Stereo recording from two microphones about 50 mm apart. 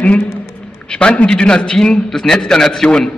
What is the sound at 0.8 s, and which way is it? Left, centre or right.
A man's voice, left.